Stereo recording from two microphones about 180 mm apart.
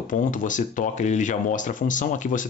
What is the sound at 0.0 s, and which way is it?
Speech, 45° left (ahead or behind).